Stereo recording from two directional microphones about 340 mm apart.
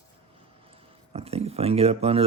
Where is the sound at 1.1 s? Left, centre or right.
Centre.